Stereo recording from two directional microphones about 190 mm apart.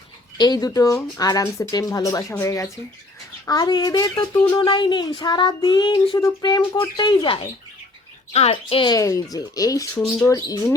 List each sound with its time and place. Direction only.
0.3 s a woman's voice: 20° left (ahead or behind)